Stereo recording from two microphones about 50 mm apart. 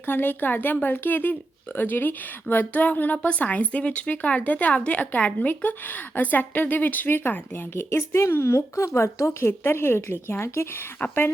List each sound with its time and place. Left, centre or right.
0.0 s a woman's voice: left
5.5 s speech: left
7.9 s a woman's voice: left
9.5 s a woman's voice: left
11.0 s speech: left